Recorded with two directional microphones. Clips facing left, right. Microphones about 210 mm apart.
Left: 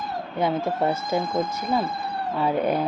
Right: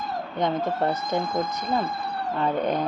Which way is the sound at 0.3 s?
10° left (ahead or behind).